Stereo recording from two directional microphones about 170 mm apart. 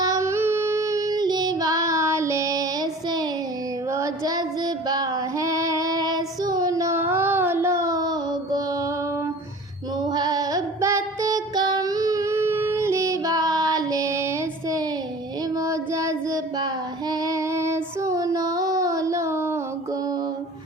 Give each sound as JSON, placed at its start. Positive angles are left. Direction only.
{"t": 0.0, "sound": "female singing", "side_deg": -20}
{"t": 10.0, "sound": "music", "side_deg": -25}
{"t": 15.5, "sound": "child singing", "side_deg": -20}